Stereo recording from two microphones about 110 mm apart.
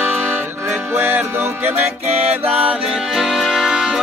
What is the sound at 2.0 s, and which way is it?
Music, 75° right (ahead or behind).